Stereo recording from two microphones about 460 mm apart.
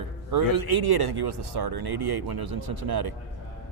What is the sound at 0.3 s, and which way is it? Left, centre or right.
Speech, right.